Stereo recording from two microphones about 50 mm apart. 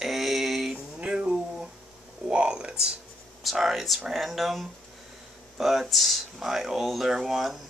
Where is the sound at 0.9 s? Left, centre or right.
Centre.